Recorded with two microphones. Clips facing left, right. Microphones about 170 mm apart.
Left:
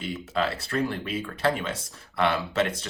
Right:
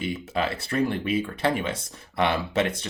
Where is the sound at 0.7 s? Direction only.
15° right (ahead or behind).